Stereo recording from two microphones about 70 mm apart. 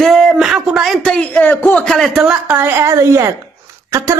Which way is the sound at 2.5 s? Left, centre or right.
Right.